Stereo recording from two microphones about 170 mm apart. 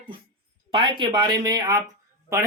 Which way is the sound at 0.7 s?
30° right (ahead or behind).